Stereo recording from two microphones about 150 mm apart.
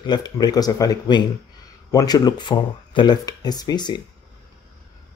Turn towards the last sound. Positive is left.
turn(degrees=30)  # may be behind; listen again after turning